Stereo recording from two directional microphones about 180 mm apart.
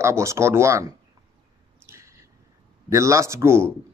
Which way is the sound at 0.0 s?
15° right (ahead or behind).